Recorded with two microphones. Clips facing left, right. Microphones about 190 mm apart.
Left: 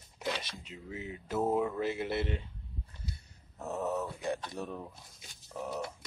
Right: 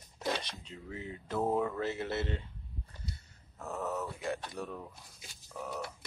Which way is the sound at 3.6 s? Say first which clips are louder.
Left 3 dB; 20° left (ahead or behind).